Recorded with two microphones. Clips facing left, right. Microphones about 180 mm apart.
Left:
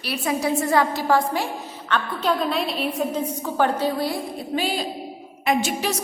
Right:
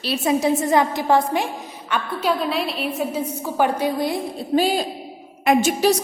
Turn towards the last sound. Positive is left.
turn(degrees=-35)  # may be behind; listen again after turning